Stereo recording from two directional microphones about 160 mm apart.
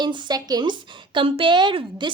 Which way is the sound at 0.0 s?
25° right (ahead or behind).